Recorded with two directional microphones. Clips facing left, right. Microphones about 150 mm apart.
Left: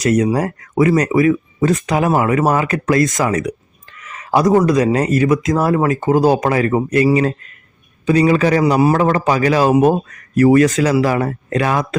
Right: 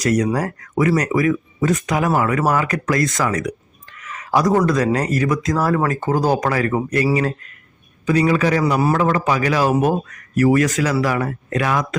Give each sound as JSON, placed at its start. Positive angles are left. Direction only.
{"t": 0.0, "sound": "a man's voice", "side_deg": 25}